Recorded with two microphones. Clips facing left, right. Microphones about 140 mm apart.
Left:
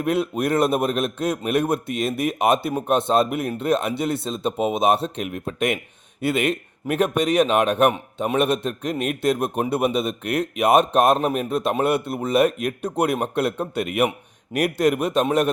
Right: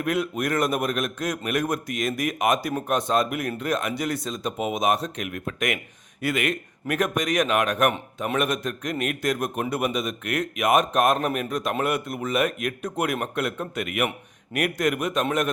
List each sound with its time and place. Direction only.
0.0 s a man's voice: 30° left (ahead or behind)